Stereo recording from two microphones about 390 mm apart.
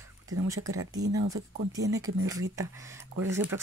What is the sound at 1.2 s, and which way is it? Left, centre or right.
Speech, right.